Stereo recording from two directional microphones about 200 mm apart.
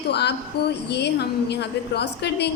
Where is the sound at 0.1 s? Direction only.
55° left (ahead or behind).